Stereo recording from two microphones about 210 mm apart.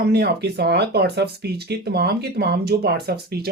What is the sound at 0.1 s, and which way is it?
Speech, 50° right (ahead or behind).